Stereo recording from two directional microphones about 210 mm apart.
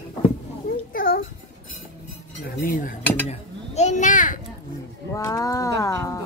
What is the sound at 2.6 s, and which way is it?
Dishes, 40° left (ahead or behind).